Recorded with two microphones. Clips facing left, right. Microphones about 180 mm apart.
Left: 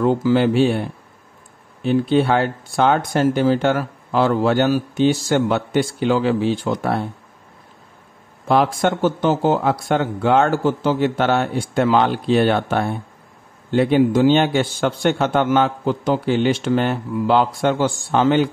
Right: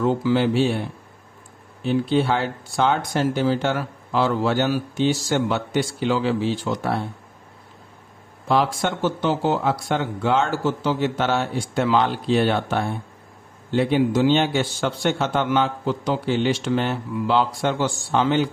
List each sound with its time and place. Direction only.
0.0 s a man's voice: 50° left (ahead or behind)
1.8 s speech: 55° left (ahead or behind)
8.5 s a man's voice: 55° left (ahead or behind)